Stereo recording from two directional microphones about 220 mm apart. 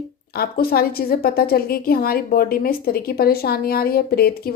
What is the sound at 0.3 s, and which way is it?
Speech, 45° left (ahead or behind).